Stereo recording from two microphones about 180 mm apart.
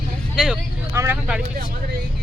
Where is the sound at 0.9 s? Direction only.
15° right (ahead or behind).